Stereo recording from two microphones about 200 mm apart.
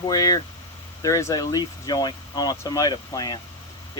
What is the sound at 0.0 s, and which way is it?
Speech, 20° left (ahead or behind).